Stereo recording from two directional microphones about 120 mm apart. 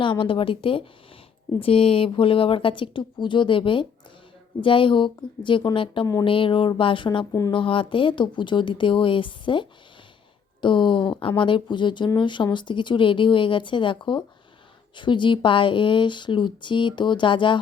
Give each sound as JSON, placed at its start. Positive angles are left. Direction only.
{"t": 0.0, "sound": "speech", "side_deg": 45}